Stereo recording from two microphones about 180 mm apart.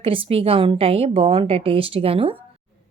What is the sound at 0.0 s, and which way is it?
Speech, 30° right (ahead or behind).